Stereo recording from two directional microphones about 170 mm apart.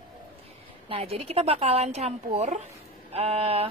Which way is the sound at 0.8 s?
35° right (ahead or behind).